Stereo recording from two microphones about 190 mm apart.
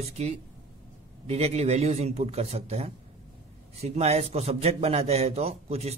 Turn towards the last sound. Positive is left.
turn(degrees=-35)  # may be behind; listen again after turning